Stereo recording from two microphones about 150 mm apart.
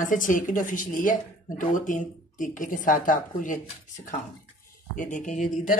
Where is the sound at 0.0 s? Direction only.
60° left (ahead or behind).